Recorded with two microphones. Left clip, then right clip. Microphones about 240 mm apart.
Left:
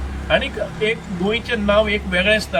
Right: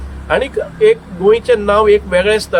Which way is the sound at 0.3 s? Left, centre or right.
Centre.